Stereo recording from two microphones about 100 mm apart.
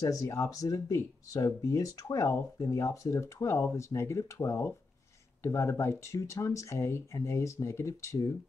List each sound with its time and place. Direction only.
0.0 s speech: 35° left (ahead or behind)